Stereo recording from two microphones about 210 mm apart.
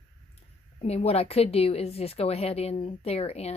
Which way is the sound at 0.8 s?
30° left (ahead or behind).